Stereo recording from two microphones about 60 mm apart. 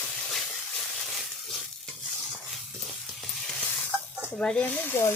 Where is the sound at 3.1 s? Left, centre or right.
Centre.